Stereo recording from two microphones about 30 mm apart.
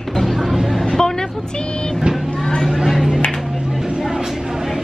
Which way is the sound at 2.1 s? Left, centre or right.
Right.